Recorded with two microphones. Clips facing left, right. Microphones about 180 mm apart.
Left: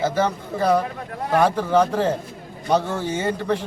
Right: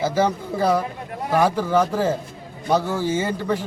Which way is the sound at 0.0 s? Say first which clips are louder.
Right 1 dB; 10° right (ahead or behind).